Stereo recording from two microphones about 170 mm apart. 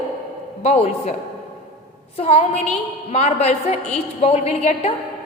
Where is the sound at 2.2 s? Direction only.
35° left (ahead or behind).